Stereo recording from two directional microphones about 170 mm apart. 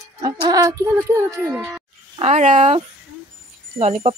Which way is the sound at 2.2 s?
40° right (ahead or behind).